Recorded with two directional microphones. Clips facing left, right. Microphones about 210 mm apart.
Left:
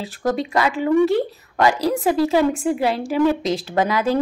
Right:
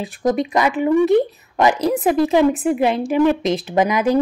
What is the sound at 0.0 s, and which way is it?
Speech, 20° right (ahead or behind).